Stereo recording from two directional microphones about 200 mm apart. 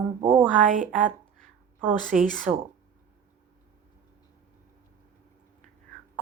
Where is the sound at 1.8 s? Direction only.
10° right (ahead or behind).